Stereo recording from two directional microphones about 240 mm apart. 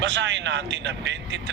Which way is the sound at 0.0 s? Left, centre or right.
Right.